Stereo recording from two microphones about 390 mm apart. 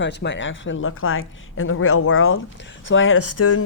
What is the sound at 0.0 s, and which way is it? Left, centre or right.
A woman's voice, left.